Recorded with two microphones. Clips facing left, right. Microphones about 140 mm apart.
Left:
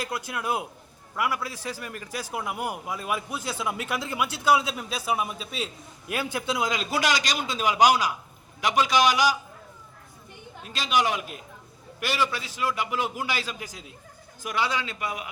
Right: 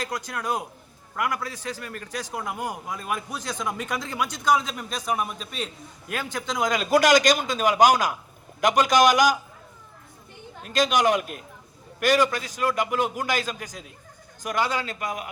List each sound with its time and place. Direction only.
0.0 s a man's voice: 10° left (ahead or behind)
6.7 s a man's voice: 50° right (ahead or behind)
10.6 s a man's voice: 45° right (ahead or behind)